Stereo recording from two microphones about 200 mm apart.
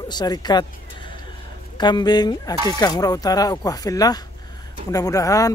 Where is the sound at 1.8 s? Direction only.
20° left (ahead or behind).